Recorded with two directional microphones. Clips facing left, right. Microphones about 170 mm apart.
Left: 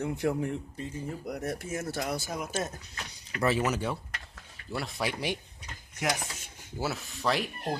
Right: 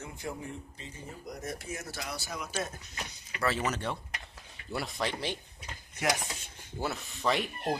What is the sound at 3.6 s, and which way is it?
Speech, 5° left (ahead or behind).